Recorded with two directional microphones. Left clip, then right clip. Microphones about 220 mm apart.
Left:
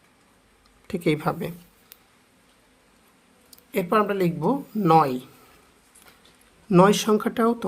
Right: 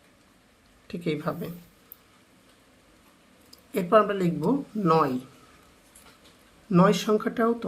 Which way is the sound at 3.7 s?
35° left (ahead or behind).